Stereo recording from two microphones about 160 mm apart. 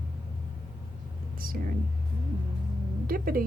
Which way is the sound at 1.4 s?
65° right (ahead or behind).